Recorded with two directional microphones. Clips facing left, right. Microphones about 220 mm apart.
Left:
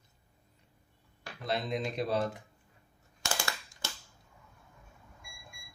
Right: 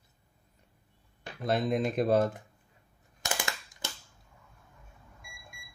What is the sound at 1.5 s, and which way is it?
Speech, 50° right (ahead or behind).